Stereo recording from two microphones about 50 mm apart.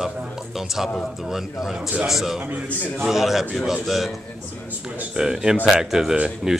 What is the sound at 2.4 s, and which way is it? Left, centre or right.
Speech, right.